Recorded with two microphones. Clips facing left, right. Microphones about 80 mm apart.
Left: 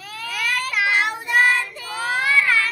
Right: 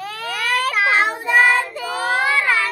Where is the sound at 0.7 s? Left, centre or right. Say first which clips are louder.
Right 1 dB; right.